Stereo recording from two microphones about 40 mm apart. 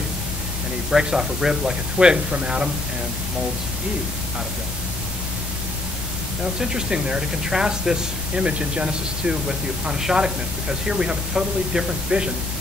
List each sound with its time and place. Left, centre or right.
0.8 s speech: centre
6.6 s speech: centre
8.5 s speech: right
9.3 s speech: centre